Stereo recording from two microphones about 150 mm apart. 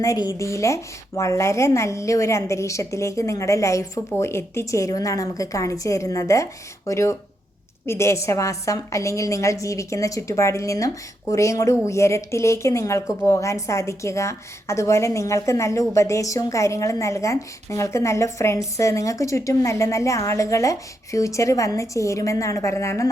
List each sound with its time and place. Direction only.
0.0 s speech: 25° left (ahead or behind)